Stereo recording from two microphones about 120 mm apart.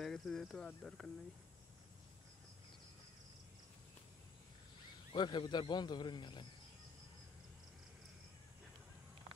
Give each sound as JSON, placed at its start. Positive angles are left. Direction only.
{"t": 0.0, "sound": "cricket", "side_deg": 5}
{"t": 5.1, "sound": "a man's voice", "side_deg": 40}